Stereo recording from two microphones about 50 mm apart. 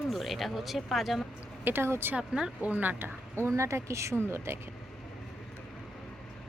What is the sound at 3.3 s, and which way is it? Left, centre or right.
Speech, right.